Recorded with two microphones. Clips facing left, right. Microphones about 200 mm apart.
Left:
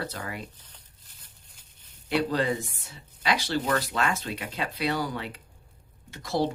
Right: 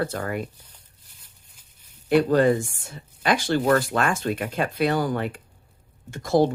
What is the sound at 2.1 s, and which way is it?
Speech, 50° right (ahead or behind).